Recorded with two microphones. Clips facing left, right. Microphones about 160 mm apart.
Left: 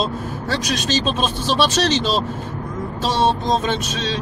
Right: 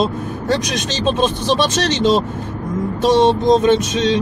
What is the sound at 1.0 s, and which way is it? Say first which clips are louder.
Speech: right 5 dB; 20° right (ahead or behind).